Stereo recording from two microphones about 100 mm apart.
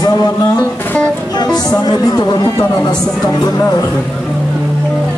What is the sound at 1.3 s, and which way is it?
Speech, 45° left (ahead or behind).